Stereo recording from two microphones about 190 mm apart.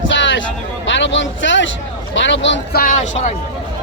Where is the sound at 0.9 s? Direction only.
75° left (ahead or behind).